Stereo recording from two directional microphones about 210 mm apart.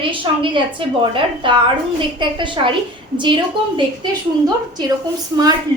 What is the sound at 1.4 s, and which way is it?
A woman's voice, 25° right (ahead or behind).